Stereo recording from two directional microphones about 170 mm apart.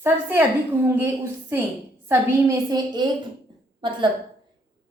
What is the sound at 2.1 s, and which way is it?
A woman's voice, 20° right (ahead or behind).